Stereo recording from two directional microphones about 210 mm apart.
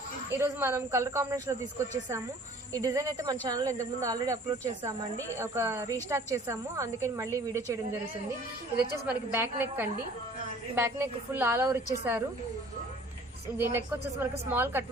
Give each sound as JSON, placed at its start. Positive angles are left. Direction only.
{"t": 0.3, "sound": "a woman's voice", "side_deg": -10}
{"t": 9.0, "sound": "a woman's voice", "side_deg": -10}
{"t": 13.6, "sound": "a woman's voice", "side_deg": -10}